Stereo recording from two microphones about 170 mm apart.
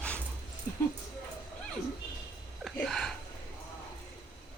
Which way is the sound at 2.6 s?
Centre (ahead or behind).